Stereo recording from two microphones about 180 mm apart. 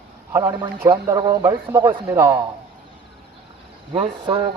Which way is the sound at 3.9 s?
30° right (ahead or behind).